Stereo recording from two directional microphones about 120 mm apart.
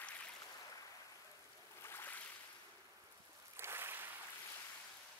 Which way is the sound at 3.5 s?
20° right (ahead or behind).